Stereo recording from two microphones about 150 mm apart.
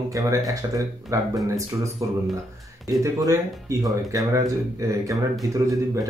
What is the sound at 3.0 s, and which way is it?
A man's voice, 20° right (ahead or behind).